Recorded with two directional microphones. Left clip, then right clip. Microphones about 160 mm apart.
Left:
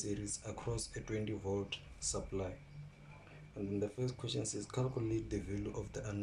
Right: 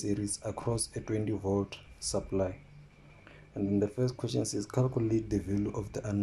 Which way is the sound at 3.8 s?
35° right (ahead or behind).